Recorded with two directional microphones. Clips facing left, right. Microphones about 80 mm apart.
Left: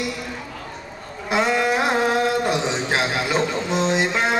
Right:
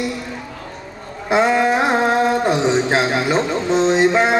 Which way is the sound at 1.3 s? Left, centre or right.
Right.